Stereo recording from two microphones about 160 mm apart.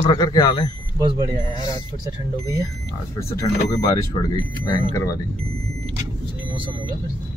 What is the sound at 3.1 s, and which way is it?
A man's voice, 20° left (ahead or behind).